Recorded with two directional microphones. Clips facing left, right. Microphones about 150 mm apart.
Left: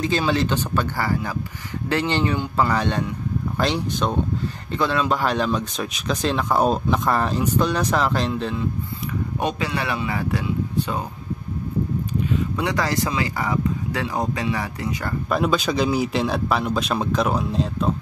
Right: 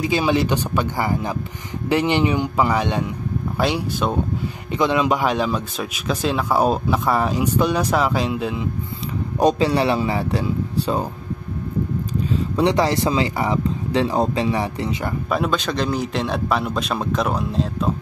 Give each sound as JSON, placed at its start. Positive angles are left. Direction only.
{"t": 0.0, "sound": "speech", "side_deg": -15}
{"t": 9.4, "sound": "speech", "side_deg": -35}
{"t": 12.3, "sound": "speech", "side_deg": -30}
{"t": 15.2, "sound": "a man's voice", "side_deg": 0}